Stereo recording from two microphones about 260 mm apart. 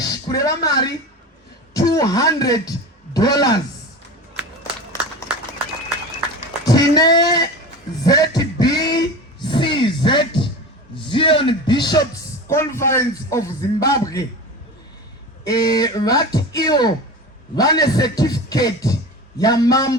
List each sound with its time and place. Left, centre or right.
0.0 s a woman's voice: centre
6.7 s a man's voice: centre
8.0 s a sound: centre
10.9 s a man's voice: centre
15.4 s a man's voice: centre